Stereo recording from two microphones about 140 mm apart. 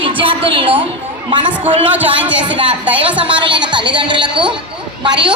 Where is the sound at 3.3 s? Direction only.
35° right (ahead or behind).